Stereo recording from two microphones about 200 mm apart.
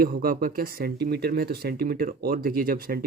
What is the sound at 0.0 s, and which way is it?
Speech, 45° right (ahead or behind).